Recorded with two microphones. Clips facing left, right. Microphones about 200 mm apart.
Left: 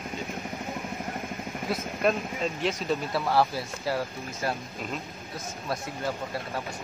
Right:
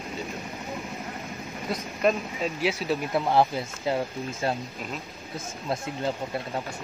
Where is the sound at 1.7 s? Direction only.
Centre (ahead or behind).